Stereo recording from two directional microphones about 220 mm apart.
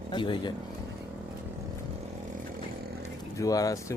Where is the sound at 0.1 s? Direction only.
20° left (ahead or behind).